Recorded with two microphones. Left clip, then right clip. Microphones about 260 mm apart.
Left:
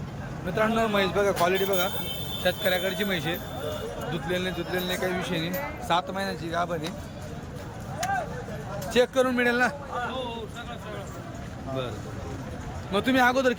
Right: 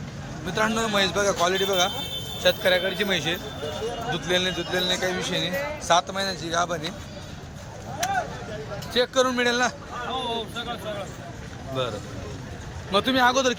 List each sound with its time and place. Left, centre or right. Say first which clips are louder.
0.4 s a man's voice: even; centre
8.9 s a man's voice: right 1 dB; centre
12.9 s a man's voice: right 2 dB; centre